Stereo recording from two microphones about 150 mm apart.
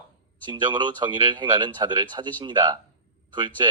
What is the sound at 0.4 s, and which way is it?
Speech, 30° right (ahead or behind).